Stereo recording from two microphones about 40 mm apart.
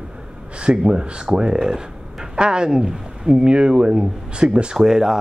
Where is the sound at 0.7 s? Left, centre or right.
Right.